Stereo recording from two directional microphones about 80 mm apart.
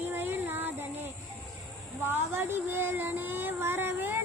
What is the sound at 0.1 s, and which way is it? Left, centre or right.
Child singing, right.